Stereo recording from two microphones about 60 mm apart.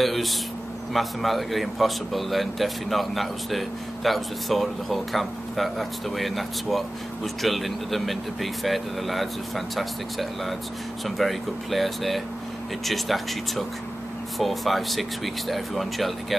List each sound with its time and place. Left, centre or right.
0.0 s speech: centre